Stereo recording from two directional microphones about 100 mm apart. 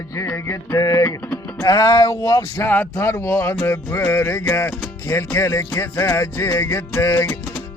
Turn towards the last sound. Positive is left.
turn(degrees=30)  # may be behind; listen again after turning